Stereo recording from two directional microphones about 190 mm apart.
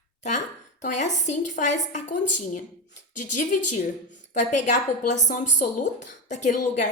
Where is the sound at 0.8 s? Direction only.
40° left (ahead or behind).